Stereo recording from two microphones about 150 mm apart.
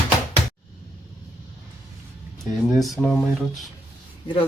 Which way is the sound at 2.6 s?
Centre (ahead or behind).